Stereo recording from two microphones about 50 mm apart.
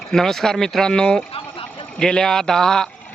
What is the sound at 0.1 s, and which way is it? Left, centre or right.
A man's voice, centre.